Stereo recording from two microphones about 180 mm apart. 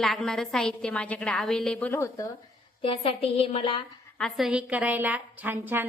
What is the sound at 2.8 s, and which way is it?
A woman's voice, 30° left (ahead or behind).